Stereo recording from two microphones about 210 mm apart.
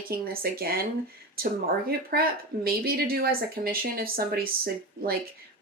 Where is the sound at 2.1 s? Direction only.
45° right (ahead or behind).